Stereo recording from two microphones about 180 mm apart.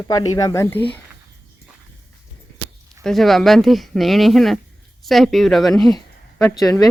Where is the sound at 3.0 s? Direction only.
Centre (ahead or behind).